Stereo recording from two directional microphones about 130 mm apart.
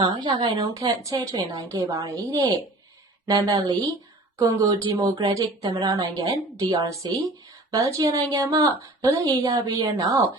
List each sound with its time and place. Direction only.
0.0 s a woman's voice: 35° right (ahead or behind)